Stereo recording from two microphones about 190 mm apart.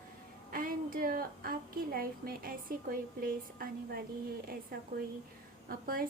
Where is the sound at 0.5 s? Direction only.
50° right (ahead or behind).